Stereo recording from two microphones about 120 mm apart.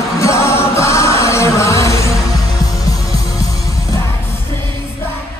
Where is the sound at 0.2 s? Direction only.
25° left (ahead or behind).